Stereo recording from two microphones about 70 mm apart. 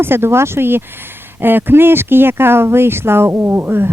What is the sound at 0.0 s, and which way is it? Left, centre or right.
Speech, right.